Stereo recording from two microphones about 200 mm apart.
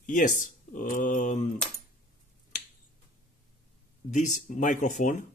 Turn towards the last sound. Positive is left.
turn(degrees=35)  # may be behind; listen again after turning